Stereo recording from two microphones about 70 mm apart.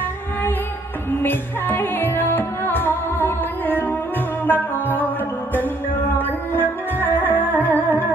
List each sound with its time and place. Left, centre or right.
1.2 s music: left